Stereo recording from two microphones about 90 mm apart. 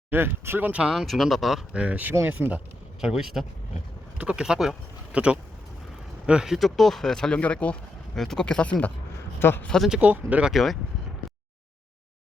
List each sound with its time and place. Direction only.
0.1 s speech: 25° right (ahead or behind)
0.7 s speech: 10° right (ahead or behind)
1.7 s speech: 15° right (ahead or behind)
3.0 s speech: 5° right (ahead or behind); by 7.8 s 15° left (ahead or behind)
8.1 s speech: 5° left (ahead or behind)
9.4 s speech: 25° left (ahead or behind)
9.6 s speech: 5° left (ahead or behind)
9.9 s speech: 15° right (ahead or behind)
10.5 s speech: centre (ahead or behind)